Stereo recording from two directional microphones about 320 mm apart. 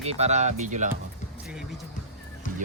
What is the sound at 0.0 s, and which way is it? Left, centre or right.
Speech, centre.